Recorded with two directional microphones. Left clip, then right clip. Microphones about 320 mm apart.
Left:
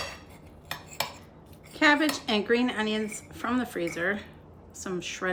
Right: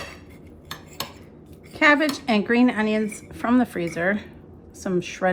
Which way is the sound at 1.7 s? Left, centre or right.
Centre.